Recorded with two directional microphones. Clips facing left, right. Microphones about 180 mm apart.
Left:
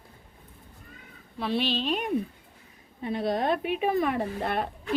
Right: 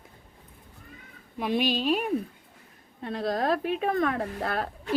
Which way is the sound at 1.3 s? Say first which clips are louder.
Right 2 dB; 10° right (ahead or behind).